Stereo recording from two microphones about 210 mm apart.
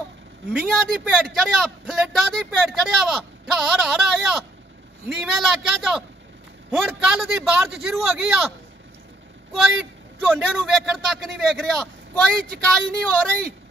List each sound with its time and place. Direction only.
0.5 s a man's voice: centre (ahead or behind)
9.5 s a man's voice: centre (ahead or behind)